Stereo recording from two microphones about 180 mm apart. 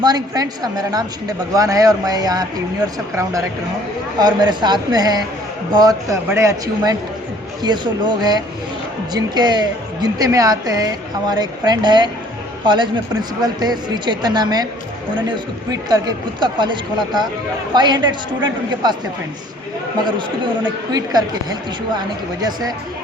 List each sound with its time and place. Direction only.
0.0 s a woman's voice: 20° right (ahead or behind)
4.2 s a woman's voice: 25° right (ahead or behind)
15.7 s a woman's voice: 20° right (ahead or behind)
20.1 s a woman's voice: 25° right (ahead or behind)